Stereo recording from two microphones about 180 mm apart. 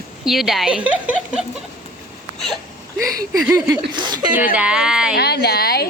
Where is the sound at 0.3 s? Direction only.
Centre (ahead or behind).